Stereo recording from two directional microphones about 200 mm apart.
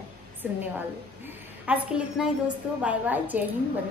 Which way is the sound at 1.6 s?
5° right (ahead or behind).